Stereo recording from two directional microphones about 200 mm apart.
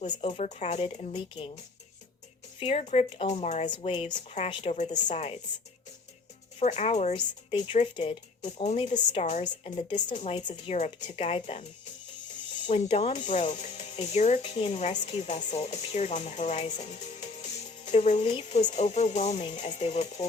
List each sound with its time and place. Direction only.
0.0 s speech: 30° left (ahead or behind)
2.6 s speech: 30° left (ahead or behind)
6.6 s speech: 35° left (ahead or behind)
12.6 s speech: 30° left (ahead or behind)